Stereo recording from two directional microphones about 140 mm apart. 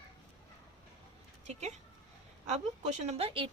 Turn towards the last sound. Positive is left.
turn(degrees=-40)  # may be behind; listen again after turning